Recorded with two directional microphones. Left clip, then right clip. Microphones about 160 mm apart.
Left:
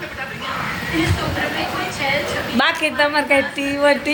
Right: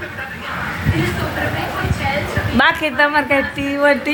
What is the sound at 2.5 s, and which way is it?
A woman's voice, 5° right (ahead or behind).